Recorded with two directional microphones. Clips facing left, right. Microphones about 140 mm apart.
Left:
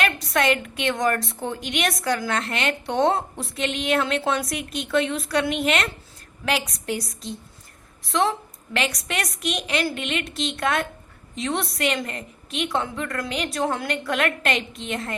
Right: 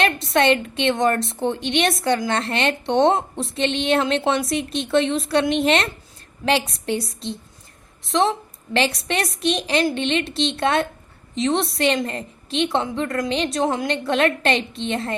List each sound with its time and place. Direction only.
0.0 s a woman's voice: 25° right (ahead or behind)